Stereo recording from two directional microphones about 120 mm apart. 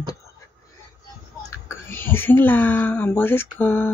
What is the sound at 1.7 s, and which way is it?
A woman's voice, 20° left (ahead or behind).